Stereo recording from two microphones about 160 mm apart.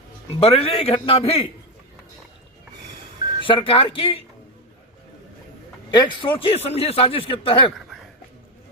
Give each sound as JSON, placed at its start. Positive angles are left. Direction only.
{"t": 0.3, "sound": "a man's voice", "side_deg": 35}
{"t": 3.4, "sound": "a man's voice", "side_deg": 35}
{"t": 5.9, "sound": "a man's voice", "side_deg": 30}